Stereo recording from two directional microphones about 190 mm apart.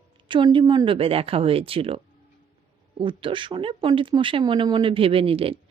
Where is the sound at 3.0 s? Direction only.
25° right (ahead or behind).